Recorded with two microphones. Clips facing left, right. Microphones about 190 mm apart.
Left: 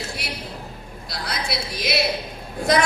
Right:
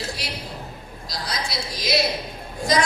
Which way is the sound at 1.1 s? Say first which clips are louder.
Left 1 dB; 60° left (ahead or behind).